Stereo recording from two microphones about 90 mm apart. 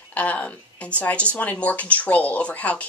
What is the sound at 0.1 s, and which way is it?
Speech, 15° left (ahead or behind).